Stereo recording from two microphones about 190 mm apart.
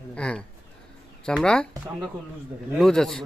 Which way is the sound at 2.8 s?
5° left (ahead or behind).